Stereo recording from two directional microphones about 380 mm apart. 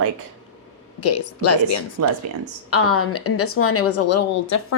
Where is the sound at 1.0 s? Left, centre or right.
Left.